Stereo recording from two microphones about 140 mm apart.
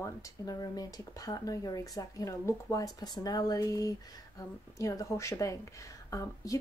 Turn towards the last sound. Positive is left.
turn(degrees=25)  # may be behind; listen again after turning